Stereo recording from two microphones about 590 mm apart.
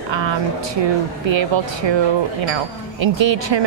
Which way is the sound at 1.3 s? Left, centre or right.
Right.